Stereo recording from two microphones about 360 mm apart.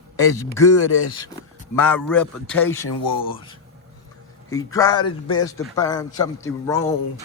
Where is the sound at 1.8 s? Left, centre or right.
Centre.